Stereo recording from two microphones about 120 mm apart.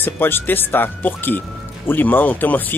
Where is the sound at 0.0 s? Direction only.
15° left (ahead or behind).